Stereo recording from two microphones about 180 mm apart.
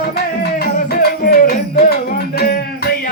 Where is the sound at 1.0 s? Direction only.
60° left (ahead or behind).